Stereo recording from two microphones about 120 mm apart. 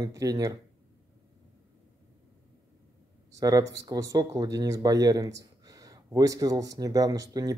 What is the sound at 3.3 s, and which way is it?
Speech, 30° right (ahead or behind).